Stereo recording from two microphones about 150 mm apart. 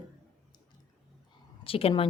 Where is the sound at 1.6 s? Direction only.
40° left (ahead or behind).